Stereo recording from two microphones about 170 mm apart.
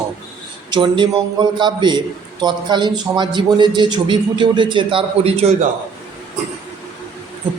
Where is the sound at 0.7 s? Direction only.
30° right (ahead or behind).